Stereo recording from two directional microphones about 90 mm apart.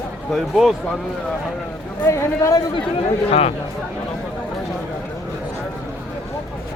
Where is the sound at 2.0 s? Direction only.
35° left (ahead or behind).